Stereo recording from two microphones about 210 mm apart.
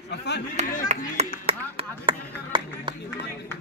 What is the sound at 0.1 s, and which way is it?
Speech, 55° left (ahead or behind).